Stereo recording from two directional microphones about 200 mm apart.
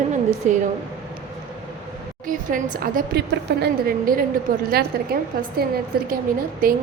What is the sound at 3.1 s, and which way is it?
A woman's voice, 50° right (ahead or behind).